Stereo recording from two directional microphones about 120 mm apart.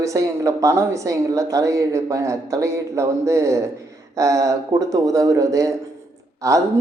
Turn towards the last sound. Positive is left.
turn(degrees=-25)  # may be behind; listen again after turning